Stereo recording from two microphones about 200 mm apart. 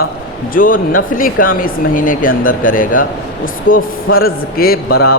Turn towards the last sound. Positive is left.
turn(degrees=50)  # may be behind; listen again after turning